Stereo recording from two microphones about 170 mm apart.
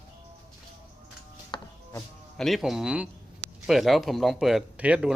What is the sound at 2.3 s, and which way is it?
Speech, centre (ahead or behind).